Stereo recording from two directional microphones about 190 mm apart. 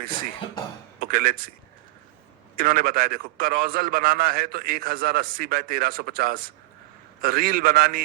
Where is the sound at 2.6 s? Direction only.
50° right (ahead or behind).